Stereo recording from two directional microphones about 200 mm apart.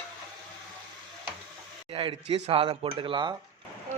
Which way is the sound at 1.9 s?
25° right (ahead or behind).